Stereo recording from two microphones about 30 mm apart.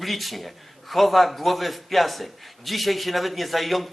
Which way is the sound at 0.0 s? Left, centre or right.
Centre.